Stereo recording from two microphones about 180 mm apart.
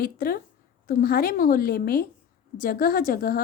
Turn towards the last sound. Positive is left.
turn(degrees=55)  # may be behind; listen again after turning